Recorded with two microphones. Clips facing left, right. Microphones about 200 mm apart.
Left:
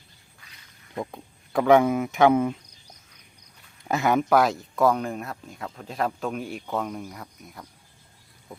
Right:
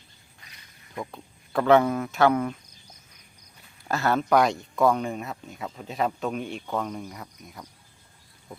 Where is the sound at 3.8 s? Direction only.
15° left (ahead or behind).